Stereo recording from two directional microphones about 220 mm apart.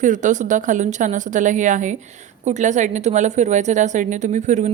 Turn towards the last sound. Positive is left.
turn(degrees=-35)  # may be behind; listen again after turning